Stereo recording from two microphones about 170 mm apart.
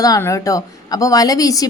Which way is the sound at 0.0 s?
20° left (ahead or behind).